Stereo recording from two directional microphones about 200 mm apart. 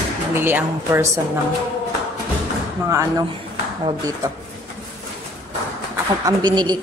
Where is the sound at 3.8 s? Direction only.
20° right (ahead or behind).